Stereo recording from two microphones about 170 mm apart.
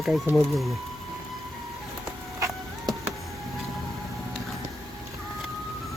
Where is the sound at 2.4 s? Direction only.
15° right (ahead or behind).